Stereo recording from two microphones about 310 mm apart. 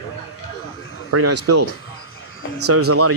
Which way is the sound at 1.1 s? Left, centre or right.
Right.